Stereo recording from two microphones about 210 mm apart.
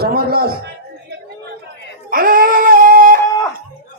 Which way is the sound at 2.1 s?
45° right (ahead or behind).